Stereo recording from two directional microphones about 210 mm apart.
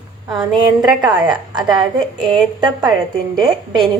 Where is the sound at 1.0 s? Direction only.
20° right (ahead or behind).